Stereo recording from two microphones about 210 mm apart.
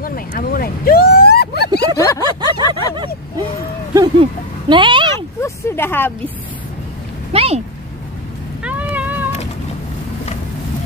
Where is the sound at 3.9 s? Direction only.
20° right (ahead or behind).